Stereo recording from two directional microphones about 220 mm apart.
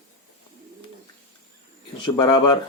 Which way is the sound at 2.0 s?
20° left (ahead or behind).